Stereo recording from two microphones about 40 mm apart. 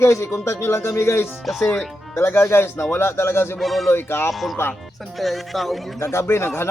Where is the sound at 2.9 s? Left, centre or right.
Left.